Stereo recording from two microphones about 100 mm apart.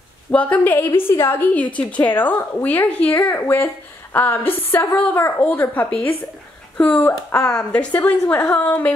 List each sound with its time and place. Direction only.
0.3 s a woman's voice: 15° left (ahead or behind)